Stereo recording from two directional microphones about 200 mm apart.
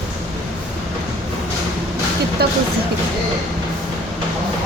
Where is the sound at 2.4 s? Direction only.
55° right (ahead or behind).